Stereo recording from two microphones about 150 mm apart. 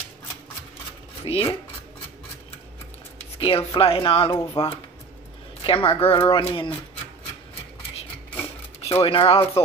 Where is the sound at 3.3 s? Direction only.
40° left (ahead or behind).